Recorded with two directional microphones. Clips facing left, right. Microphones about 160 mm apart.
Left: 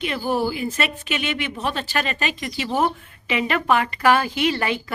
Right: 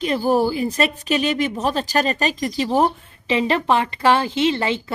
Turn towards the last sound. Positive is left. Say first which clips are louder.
# right 2 dB
turn(degrees=-25)  # may be behind; listen again after turning